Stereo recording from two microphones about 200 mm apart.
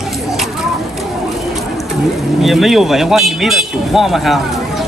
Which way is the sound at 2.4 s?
Centre (ahead or behind).